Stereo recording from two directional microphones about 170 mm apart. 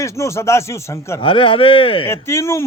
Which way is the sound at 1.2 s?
30° left (ahead or behind).